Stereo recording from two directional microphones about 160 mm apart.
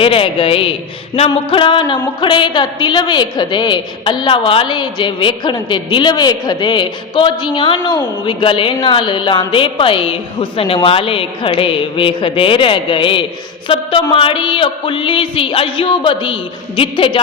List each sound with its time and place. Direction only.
0.0 s music: 35° left (ahead or behind)
1.3 s a woman's voice: 30° left (ahead or behind)
10.8 s music: 35° left (ahead or behind)